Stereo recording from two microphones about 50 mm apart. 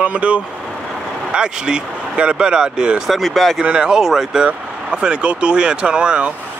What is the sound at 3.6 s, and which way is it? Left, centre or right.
Speech, centre.